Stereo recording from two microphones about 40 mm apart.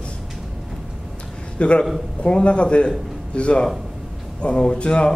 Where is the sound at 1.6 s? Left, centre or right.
Left.